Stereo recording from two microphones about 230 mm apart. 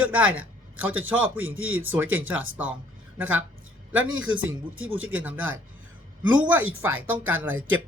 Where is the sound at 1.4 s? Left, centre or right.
Right.